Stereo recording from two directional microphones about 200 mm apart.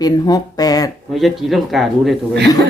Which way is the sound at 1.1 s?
Centre (ahead or behind).